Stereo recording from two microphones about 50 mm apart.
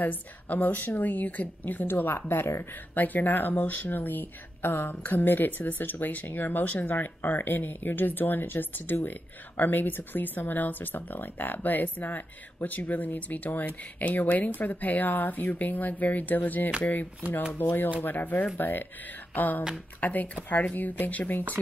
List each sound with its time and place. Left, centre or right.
0.0 s speech: left
2.9 s speech: left
17.5 s speech: left